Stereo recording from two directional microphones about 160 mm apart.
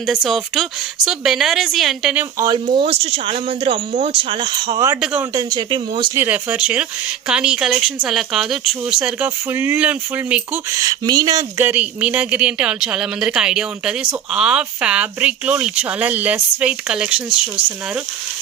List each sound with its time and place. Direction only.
0.0 s a woman's voice: centre (ahead or behind)
2.4 s speech: 30° right (ahead or behind)
6.1 s a woman's voice: 10° right (ahead or behind)
10.8 s speech: 25° right (ahead or behind); by 17.3 s 5° right (ahead or behind)